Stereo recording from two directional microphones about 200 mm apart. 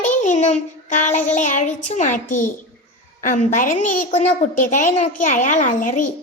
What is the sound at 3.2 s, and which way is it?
Child singing, 40° left (ahead or behind).